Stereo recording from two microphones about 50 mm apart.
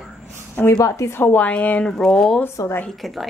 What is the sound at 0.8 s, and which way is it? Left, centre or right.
Speech, left.